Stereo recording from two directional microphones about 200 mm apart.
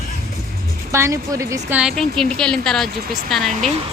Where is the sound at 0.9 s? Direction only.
15° right (ahead or behind).